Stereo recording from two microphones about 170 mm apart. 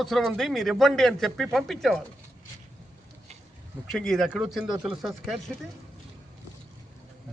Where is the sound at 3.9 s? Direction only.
5° left (ahead or behind).